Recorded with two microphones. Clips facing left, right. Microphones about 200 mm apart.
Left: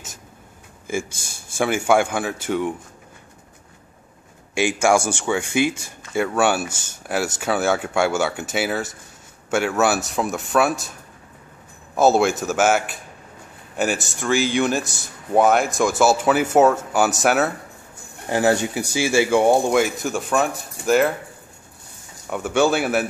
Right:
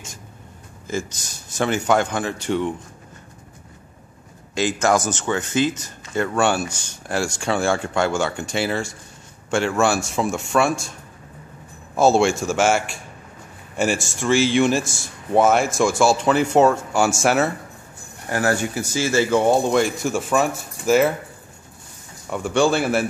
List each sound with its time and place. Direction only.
0.8 s speech: 10° left (ahead or behind)
4.6 s speech: 10° left (ahead or behind)
12.0 s speech: 5° left (ahead or behind)
18.3 s speech: 20° left (ahead or behind); by 21.1 s centre (ahead or behind)
22.3 s speech: 5° left (ahead or behind)